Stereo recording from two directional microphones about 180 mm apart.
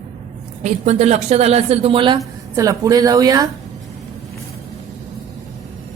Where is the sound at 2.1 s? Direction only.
20° right (ahead or behind).